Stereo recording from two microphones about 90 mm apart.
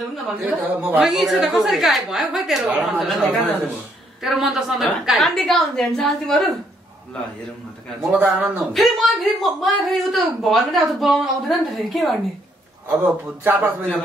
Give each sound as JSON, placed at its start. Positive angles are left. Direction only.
{"t": 0.3, "sound": "a man's voice", "side_deg": -25}
{"t": 1.0, "sound": "speech", "side_deg": -5}
{"t": 8.2, "sound": "a man's voice", "side_deg": -20}
{"t": 8.5, "sound": "speech", "side_deg": 0}
{"t": 12.8, "sound": "a man's voice", "side_deg": -20}